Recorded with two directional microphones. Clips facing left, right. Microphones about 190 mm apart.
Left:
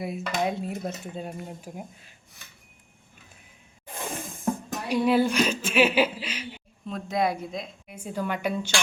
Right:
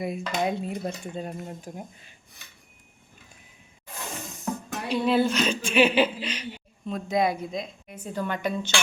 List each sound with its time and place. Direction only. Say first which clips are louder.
0.0 s dishes: right 1 dB; centre (ahead or behind)
3.9 s snake: left 3 dB; 55° left (ahead or behind)
4.9 s speech: left 1 dB; 10° left (ahead or behind)